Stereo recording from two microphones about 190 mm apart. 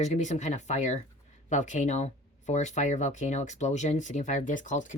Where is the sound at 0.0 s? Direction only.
40° left (ahead or behind).